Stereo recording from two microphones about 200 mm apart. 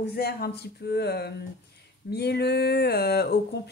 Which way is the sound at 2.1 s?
55° left (ahead or behind).